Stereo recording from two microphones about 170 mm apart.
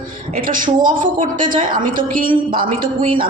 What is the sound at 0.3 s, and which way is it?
A woman's voice, 55° right (ahead or behind).